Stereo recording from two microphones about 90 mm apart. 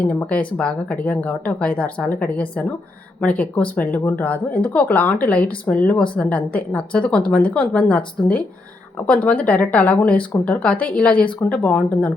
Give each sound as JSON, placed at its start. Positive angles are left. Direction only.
{"t": 0.0, "sound": "speech", "side_deg": 15}